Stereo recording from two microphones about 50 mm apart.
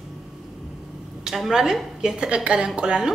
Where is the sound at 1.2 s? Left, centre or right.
Centre.